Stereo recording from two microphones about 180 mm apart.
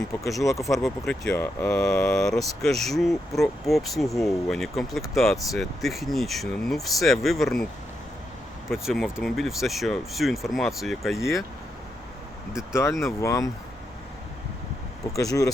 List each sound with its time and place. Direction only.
0.8 s speech: centre (ahead or behind)
8.7 s speech: centre (ahead or behind)
11.2 s speech: 15° left (ahead or behind)
12.7 s speech: 15° left (ahead or behind)
15.0 s speech: 20° left (ahead or behind)